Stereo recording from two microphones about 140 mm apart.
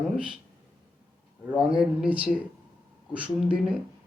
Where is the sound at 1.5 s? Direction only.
5° right (ahead or behind).